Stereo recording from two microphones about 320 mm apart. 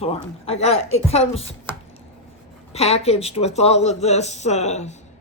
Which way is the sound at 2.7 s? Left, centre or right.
Centre.